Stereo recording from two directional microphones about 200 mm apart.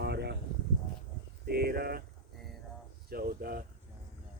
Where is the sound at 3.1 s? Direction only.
50° right (ahead or behind).